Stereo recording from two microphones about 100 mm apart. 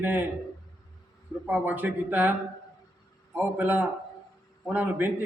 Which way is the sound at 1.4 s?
20° right (ahead or behind).